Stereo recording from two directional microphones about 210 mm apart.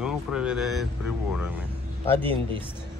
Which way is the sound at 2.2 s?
25° right (ahead or behind).